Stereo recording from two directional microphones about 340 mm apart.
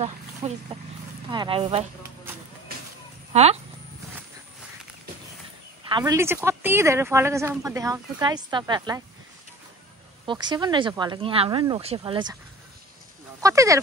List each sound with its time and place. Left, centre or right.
0.4 s speech: centre
5.9 s speech: centre
10.2 s speech: centre
13.4 s speech: centre